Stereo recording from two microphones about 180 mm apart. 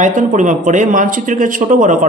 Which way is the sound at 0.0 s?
45° right (ahead or behind).